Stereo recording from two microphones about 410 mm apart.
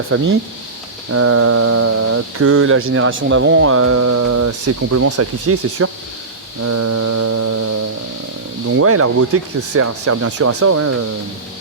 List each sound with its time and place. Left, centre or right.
0.1 s speech: right
6.6 s mantra: right
8.8 s speech: right